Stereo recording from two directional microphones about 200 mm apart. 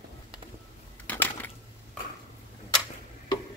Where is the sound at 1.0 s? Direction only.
10° left (ahead or behind).